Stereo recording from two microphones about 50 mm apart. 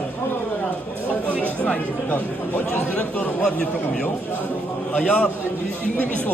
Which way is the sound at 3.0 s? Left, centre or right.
Left.